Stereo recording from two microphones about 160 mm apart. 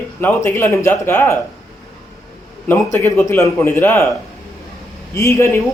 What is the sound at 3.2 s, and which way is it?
Speech, 15° left (ahead or behind).